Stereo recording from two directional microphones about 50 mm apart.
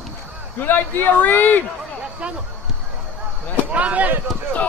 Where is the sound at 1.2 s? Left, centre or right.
Left.